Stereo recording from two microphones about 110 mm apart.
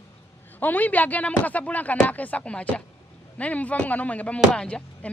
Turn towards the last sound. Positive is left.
turn(degrees=10)  # may be behind; listen again after turning